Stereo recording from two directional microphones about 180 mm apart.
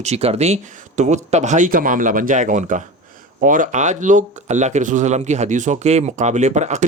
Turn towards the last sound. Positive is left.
turn(degrees=-40)  # may be behind; listen again after turning